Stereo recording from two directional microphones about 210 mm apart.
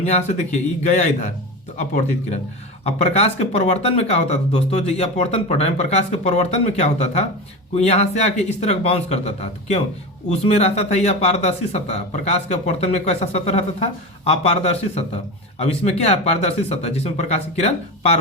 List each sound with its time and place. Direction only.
0.0 s speech: 30° left (ahead or behind)
2.8 s speech: 30° left (ahead or behind)